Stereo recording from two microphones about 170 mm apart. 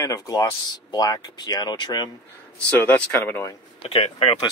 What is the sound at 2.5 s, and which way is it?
Speech, 10° left (ahead or behind).